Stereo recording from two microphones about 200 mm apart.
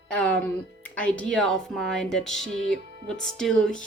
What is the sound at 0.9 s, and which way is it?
Speech, 5° left (ahead or behind).